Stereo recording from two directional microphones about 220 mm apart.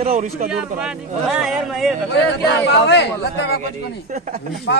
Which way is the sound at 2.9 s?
50° left (ahead or behind).